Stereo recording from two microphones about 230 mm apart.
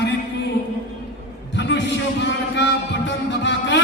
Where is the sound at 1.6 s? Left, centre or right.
Left.